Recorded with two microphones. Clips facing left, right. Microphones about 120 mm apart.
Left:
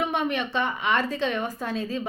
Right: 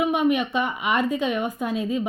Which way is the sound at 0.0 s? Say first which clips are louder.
Right 5 dB; 10° right (ahead or behind).